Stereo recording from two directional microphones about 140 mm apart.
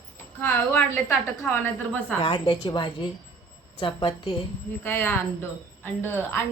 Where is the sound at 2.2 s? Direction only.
40° left (ahead or behind).